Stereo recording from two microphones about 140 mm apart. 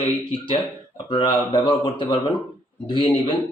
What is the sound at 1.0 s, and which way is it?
Speech, 35° left (ahead or behind).